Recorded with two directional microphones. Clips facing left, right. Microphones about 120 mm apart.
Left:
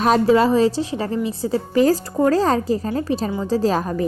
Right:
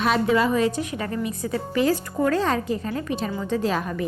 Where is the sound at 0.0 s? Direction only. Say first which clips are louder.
Left 5 dB; 35° left (ahead or behind).